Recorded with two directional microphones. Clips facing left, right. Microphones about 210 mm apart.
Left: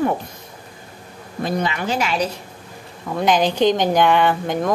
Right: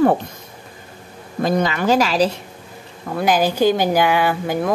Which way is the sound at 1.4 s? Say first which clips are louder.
Right 4 dB; 40° right (ahead or behind).